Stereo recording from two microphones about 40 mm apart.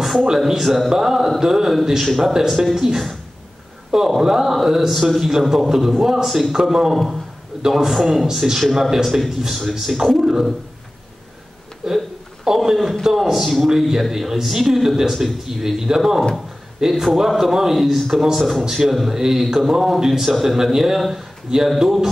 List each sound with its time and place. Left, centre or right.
0.4 s a man's voice: centre
4.2 s a man's voice: centre
11.8 s a man's voice: centre